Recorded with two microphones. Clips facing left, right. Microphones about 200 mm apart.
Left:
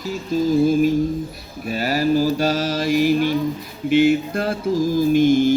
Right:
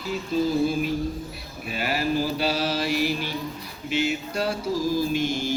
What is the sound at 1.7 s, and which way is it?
Mantra, 40° left (ahead or behind).